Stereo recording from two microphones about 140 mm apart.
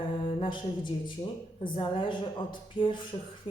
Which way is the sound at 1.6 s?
35° left (ahead or behind).